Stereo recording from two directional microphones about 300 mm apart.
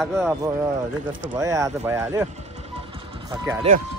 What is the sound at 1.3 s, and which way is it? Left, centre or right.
Speech, centre.